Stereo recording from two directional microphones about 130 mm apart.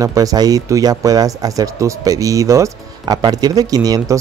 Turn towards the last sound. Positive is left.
turn(degrees=-30)  # may be behind; listen again after turning